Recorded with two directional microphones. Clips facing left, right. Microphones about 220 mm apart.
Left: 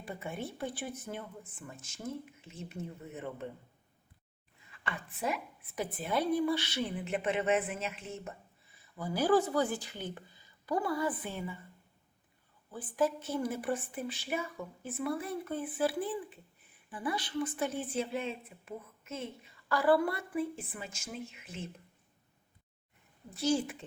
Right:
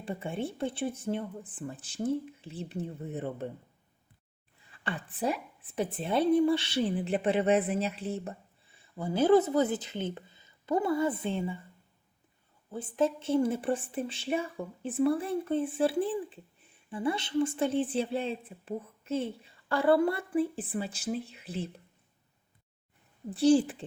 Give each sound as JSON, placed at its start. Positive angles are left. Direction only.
{"t": 0.0, "sound": "speech", "side_deg": -30}
{"t": 4.7, "sound": "speech", "side_deg": -30}
{"t": 12.7, "sound": "speech", "side_deg": -25}
{"t": 23.3, "sound": "speech", "side_deg": -30}